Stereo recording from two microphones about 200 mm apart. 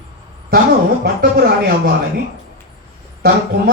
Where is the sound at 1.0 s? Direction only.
55° right (ahead or behind).